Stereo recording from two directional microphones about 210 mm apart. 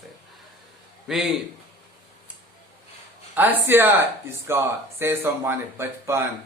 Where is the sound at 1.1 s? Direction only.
Centre (ahead or behind).